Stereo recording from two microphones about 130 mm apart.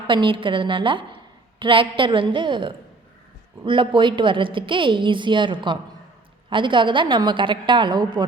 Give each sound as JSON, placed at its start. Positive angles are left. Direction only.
{"t": 0.1, "sound": "a woman's voice", "side_deg": -40}